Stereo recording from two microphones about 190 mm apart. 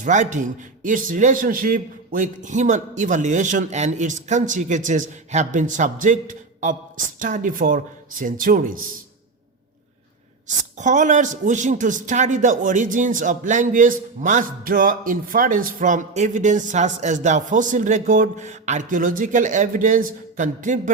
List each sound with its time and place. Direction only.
0.0 s a man's voice: 40° right (ahead or behind)
10.8 s a man's voice: 40° right (ahead or behind)